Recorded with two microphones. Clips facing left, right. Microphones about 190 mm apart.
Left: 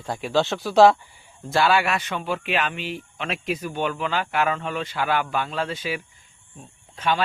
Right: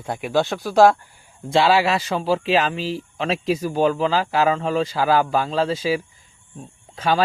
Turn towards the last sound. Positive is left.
turn(degrees=-35)  # may be behind; listen again after turning